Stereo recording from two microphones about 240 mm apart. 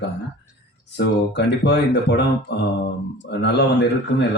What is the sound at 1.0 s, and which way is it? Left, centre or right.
Speech, left.